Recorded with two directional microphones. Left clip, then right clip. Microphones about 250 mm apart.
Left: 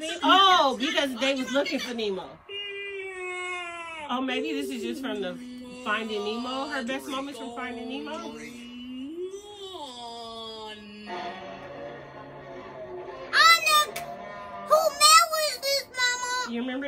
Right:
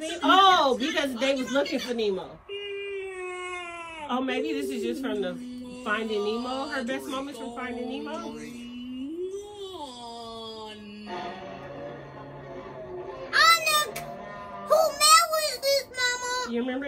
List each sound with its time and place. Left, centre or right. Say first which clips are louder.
0.2 s a sound: even; centre
1.2 s a man's voice: even; centre
4.1 s a man's voice: right 1 dB; centre
11.1 s music: even; centre
13.6 s music: left 3 dB; centre
15.3 s child singing: right 1 dB; centre